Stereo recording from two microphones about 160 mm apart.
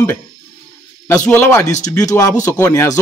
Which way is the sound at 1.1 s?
15° left (ahead or behind).